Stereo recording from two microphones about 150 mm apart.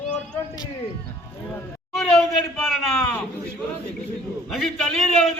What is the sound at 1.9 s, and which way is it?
Speech, centre (ahead or behind).